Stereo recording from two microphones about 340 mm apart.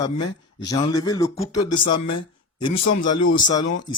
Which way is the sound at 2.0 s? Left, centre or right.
Left.